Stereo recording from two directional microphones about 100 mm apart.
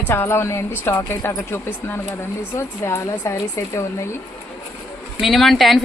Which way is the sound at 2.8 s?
30° left (ahead or behind).